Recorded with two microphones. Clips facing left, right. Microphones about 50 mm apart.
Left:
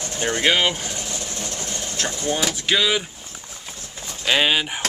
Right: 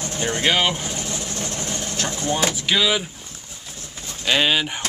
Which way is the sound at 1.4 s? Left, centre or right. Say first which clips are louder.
Right 2 dB; right.